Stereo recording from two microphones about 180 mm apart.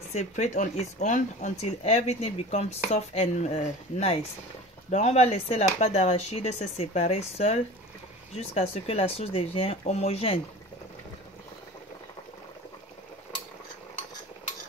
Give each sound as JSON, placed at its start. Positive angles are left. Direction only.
{"t": 0.1, "sound": "speech", "side_deg": 40}